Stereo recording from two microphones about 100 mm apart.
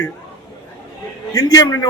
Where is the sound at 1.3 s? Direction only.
35° left (ahead or behind).